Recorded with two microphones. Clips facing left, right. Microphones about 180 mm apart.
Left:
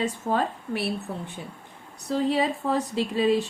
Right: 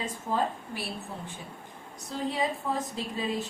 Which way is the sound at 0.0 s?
70° left (ahead or behind).